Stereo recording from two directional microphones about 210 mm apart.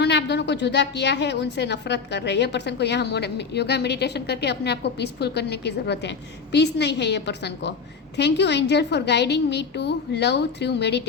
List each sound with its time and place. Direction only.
0.0 s a woman's voice: 55° left (ahead or behind)